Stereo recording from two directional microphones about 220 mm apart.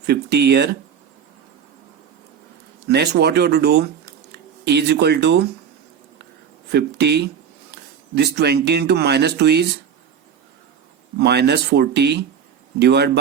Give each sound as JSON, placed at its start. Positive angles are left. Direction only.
{"t": 0.0, "sound": "speech", "side_deg": -50}
{"t": 2.8, "sound": "speech", "side_deg": -50}
{"t": 6.7, "sound": "speech", "side_deg": -50}
{"t": 11.2, "sound": "speech", "side_deg": -50}